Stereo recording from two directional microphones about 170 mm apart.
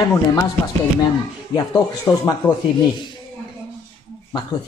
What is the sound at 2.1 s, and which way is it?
Speech, 20° left (ahead or behind).